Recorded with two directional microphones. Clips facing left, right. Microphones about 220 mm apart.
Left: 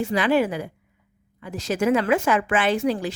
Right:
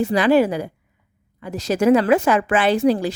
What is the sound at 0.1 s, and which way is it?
A woman's voice, 35° right (ahead or behind).